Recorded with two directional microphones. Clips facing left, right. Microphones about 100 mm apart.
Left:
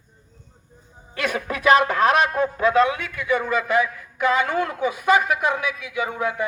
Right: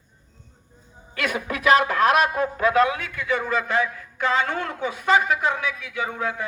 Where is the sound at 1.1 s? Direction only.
30° left (ahead or behind).